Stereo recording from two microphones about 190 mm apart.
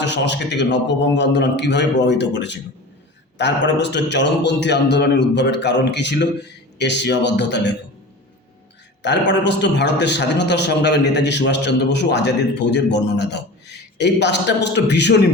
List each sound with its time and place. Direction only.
0.0 s a man's voice: 65° left (ahead or behind)
9.0 s a man's voice: 65° left (ahead or behind)